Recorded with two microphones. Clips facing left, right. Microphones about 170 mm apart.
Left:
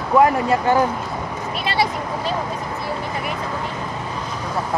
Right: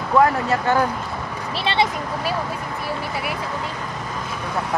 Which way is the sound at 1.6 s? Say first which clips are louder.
Right 1 dB; 25° right (ahead or behind).